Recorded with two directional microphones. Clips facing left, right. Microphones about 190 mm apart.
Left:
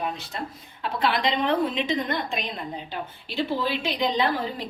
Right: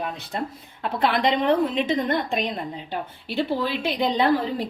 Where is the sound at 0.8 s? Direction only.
55° right (ahead or behind).